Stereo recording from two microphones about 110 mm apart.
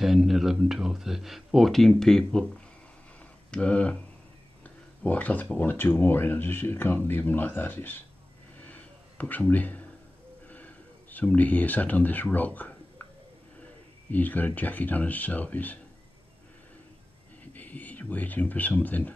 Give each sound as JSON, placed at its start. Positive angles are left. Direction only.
{"t": 0.0, "sound": "speech", "side_deg": -5}
{"t": 8.6, "sound": "a sound", "side_deg": 15}
{"t": 10.5, "sound": "speech", "side_deg": 15}
{"t": 14.1, "sound": "speech", "side_deg": 15}
{"t": 17.5, "sound": "speech", "side_deg": 15}